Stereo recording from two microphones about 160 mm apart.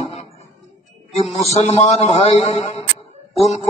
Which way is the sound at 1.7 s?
40° left (ahead or behind).